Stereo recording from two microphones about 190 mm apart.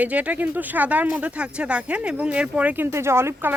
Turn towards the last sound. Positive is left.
turn(degrees=-15)  # may be behind; listen again after turning